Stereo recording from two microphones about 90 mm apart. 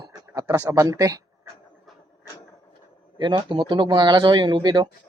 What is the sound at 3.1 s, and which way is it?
Speech, 60° right (ahead or behind).